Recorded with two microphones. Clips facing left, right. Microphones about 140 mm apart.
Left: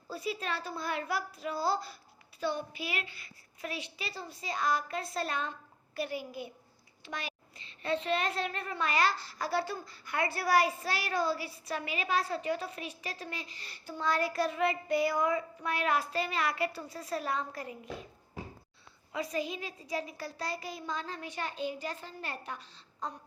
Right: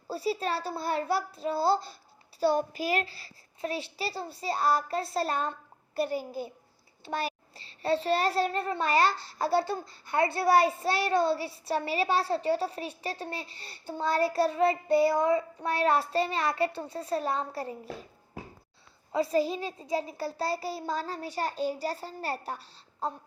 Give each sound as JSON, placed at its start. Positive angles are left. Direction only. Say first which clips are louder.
{"t": 0.1, "sound": "a child's voice", "louder": "right 6 dB", "side_deg": -30}
{"t": 2.4, "sound": "a child's voice", "louder": "right 8 dB", "side_deg": -40}
{"t": 19.1, "sound": "a child's voice", "louder": "right 8 dB", "side_deg": -30}